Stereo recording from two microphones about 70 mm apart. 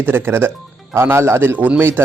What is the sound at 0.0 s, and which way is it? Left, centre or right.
Speech, right.